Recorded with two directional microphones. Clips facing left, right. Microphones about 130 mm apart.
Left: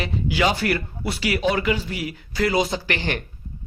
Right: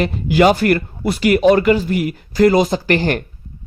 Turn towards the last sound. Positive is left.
turn(degrees=-45)  # may be behind; listen again after turning